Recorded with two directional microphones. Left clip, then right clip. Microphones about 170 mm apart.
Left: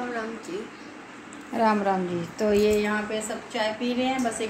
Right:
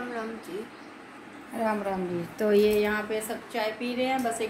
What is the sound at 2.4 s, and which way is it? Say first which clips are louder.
Speech: left 1 dB; 20° right (ahead or behind).